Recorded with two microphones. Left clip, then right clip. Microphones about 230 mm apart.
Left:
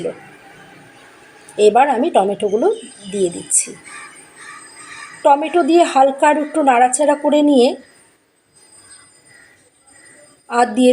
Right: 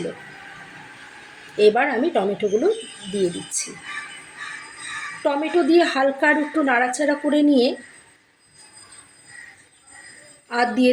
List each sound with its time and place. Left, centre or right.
1.5 s a woman's voice: centre
5.2 s a woman's voice: centre
10.5 s a woman's voice: centre